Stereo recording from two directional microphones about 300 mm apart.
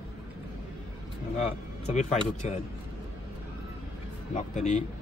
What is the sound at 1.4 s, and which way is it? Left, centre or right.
Speech, left.